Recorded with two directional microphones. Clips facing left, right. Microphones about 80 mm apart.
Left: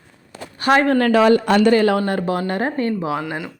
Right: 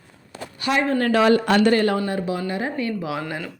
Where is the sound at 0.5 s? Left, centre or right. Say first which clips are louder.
Left 6 dB; left.